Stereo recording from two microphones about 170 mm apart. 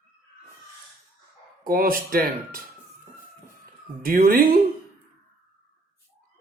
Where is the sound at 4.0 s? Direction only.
55° right (ahead or behind).